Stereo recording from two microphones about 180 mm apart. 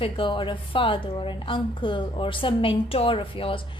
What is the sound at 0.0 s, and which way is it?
A woman's voice, 30° left (ahead or behind).